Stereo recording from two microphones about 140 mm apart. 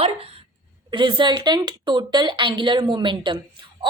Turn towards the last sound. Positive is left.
turn(degrees=-35)  # may be behind; listen again after turning